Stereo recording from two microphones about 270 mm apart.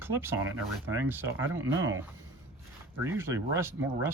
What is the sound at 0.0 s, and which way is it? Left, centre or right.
Speech, centre.